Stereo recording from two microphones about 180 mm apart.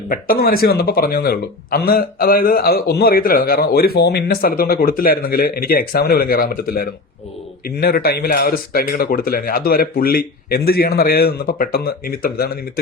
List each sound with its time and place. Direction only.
0.1 s a man's voice: 55° left (ahead or behind)